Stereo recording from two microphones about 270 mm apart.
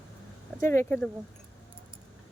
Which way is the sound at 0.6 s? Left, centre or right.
Centre.